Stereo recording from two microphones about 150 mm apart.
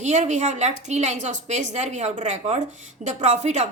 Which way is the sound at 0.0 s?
50° right (ahead or behind).